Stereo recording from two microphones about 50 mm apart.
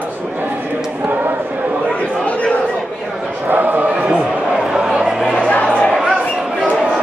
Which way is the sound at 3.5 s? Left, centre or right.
Right.